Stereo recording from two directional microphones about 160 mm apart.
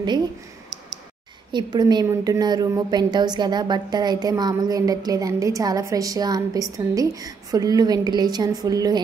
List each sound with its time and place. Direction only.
1.5 s a woman's voice: 25° right (ahead or behind)